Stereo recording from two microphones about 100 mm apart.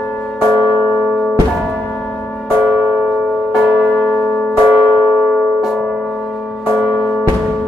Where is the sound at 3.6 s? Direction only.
Centre (ahead or behind).